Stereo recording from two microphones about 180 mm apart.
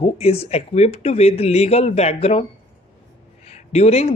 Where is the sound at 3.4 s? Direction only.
35° left (ahead or behind).